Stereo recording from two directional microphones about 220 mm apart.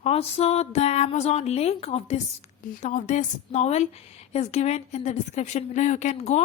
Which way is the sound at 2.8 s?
35° left (ahead or behind).